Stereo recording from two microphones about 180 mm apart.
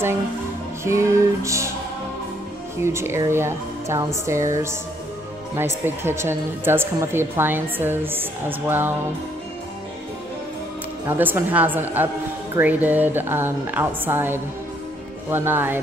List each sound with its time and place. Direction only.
0.8 s a woman's voice: 15° right (ahead or behind)
2.8 s a woman's voice: 15° right (ahead or behind)
11.1 s a woman's voice: 10° right (ahead or behind)